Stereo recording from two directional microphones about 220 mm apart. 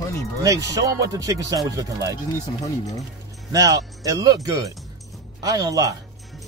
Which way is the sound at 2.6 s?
15° left (ahead or behind).